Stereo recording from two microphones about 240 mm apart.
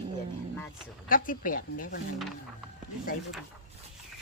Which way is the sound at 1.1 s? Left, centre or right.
Left.